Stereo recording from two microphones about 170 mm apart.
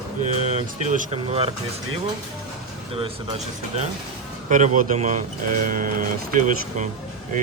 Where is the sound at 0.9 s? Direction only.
40° right (ahead or behind).